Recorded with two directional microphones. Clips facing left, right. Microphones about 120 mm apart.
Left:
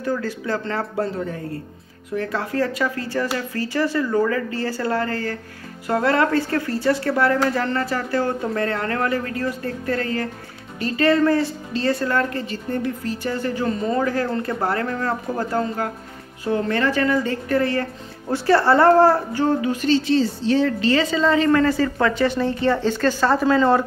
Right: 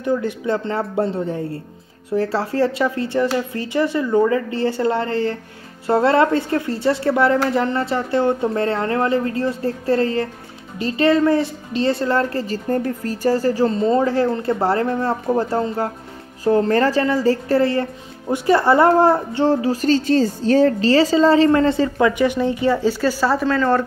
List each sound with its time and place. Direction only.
0.0 s a woman's voice: 20° right (ahead or behind)
23.4 s speech: 15° left (ahead or behind)